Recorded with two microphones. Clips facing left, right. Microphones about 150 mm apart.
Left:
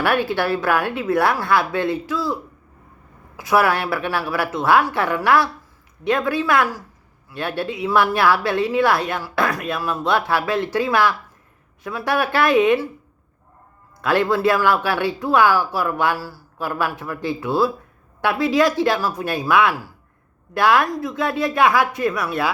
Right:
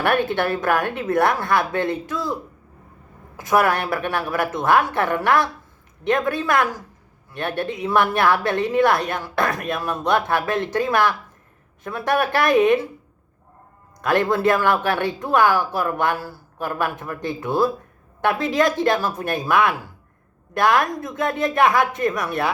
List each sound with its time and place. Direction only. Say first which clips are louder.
0.0 s speech: even; 50° right (ahead or behind)
3.3 s speech: left 1 dB; 50° right (ahead or behind)
14.0 s a man's voice: left 1 dB; 45° right (ahead or behind)
18.4 s speech: left 3 dB; 50° right (ahead or behind)